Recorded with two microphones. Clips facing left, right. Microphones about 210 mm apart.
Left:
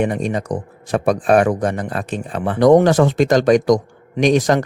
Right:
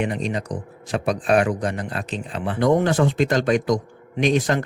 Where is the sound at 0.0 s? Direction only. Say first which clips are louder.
Left 5 dB; 50° left (ahead or behind).